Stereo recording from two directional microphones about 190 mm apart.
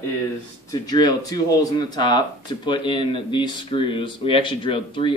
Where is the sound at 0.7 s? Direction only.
20° left (ahead or behind).